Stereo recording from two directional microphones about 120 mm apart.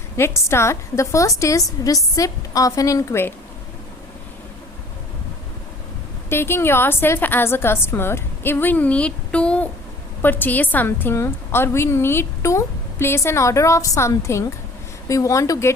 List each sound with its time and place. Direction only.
0.2 s a woman's voice: 20° left (ahead or behind)
6.3 s a woman's voice: 20° left (ahead or behind)